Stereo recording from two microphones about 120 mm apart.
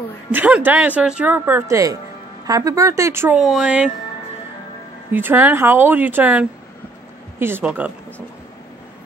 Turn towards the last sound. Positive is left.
turn(degrees=-10)  # may be behind; listen again after turning